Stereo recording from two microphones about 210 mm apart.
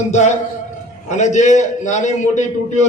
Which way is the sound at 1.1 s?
35° left (ahead or behind).